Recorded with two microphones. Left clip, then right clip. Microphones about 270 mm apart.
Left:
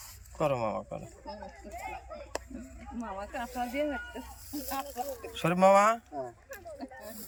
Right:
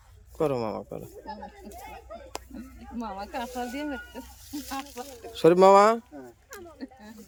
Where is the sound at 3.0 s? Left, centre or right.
Right.